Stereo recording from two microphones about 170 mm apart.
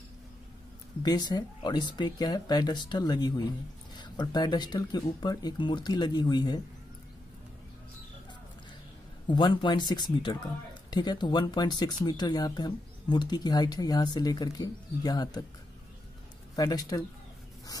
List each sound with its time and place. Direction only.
1.0 s speech: 25° left (ahead or behind)
9.3 s speech: 25° left (ahead or behind)
16.5 s speech: 20° left (ahead or behind)